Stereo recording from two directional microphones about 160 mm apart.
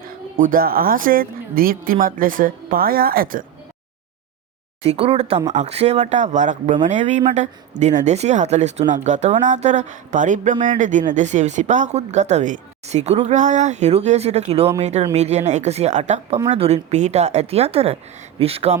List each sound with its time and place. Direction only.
0.3 s speech: 60° right (ahead or behind)
4.8 s speech: 40° right (ahead or behind)